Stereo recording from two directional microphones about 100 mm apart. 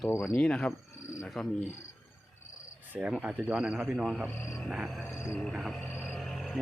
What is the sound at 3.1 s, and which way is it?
A man's voice, 10° right (ahead or behind).